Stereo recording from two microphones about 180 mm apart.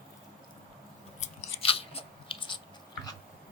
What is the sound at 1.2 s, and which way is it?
Biting, 35° left (ahead or behind).